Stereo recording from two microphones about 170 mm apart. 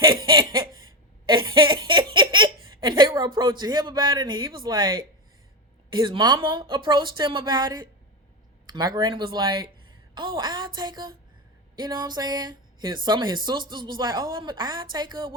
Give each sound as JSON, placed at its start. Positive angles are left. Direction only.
{"t": 0.0, "sound": "laughter", "side_deg": -30}
{"t": 1.3, "sound": "a sound", "side_deg": -30}
{"t": 5.9, "sound": "a woman's voice", "side_deg": -25}